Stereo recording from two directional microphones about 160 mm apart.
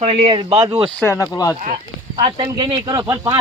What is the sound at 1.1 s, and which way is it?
Speech, 20° left (ahead or behind).